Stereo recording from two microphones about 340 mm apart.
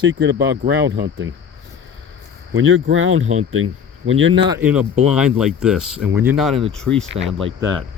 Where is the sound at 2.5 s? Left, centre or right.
Right.